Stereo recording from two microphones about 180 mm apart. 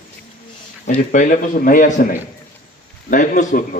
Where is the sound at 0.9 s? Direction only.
45° left (ahead or behind).